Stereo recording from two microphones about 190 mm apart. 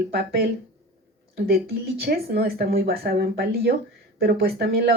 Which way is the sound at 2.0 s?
55° right (ahead or behind).